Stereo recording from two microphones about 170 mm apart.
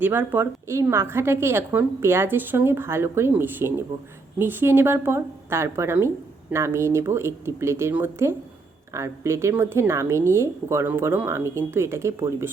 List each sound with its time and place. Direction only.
0.0 s a woman's voice: 10° right (ahead or behind)